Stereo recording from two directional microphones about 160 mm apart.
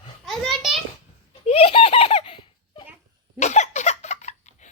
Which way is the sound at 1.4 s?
40° left (ahead or behind).